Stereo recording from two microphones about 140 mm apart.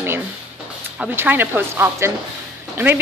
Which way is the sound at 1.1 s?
15° right (ahead or behind).